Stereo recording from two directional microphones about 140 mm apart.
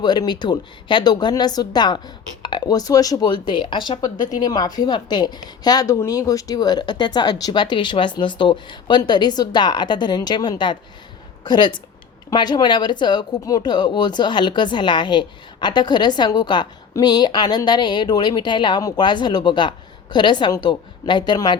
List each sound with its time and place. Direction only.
0.0 s speech: 30° left (ahead or behind)